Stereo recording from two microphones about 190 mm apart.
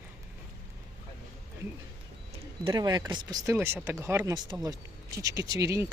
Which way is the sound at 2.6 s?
20° right (ahead or behind).